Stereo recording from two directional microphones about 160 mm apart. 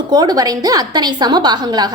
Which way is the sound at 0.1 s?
25° right (ahead or behind).